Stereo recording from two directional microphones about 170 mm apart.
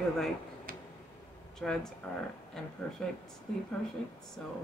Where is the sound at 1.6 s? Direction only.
5° left (ahead or behind).